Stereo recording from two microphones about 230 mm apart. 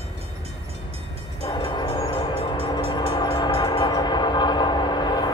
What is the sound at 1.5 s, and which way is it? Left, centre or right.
Train, centre.